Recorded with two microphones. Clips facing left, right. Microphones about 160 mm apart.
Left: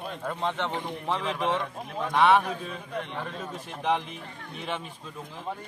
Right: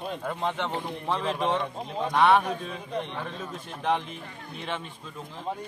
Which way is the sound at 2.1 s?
Centre (ahead or behind).